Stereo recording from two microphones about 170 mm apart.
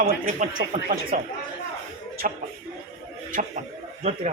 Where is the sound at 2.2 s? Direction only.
50° right (ahead or behind).